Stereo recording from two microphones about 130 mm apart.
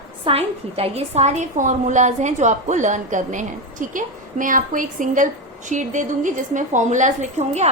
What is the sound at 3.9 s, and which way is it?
A woman's voice, 90° right.